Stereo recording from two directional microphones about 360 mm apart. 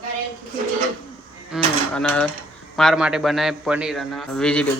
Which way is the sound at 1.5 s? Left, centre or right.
Centre.